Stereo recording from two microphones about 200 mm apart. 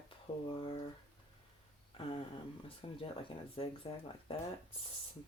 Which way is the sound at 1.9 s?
30° left (ahead or behind).